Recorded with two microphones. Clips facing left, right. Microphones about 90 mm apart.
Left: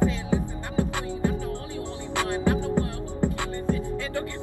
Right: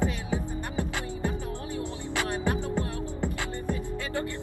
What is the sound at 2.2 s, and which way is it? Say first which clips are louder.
Music: left 6 dB; 20° right (ahead or behind).